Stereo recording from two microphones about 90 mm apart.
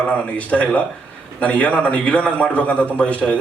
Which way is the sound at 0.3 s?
15° left (ahead or behind).